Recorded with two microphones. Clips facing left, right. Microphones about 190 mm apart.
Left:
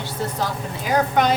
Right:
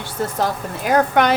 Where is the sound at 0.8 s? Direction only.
60° right (ahead or behind).